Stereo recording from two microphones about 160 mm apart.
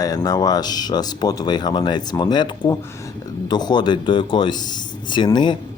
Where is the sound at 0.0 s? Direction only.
25° left (ahead or behind).